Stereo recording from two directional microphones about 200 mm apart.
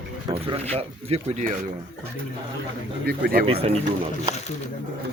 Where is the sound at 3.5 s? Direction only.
30° right (ahead or behind).